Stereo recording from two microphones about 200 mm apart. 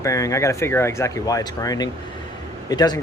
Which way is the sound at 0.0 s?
15° left (ahead or behind).